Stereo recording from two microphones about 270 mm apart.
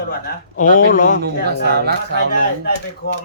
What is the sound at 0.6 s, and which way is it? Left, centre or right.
Speech, left.